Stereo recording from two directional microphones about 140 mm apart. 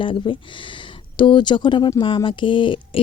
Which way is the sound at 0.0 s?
35° left (ahead or behind).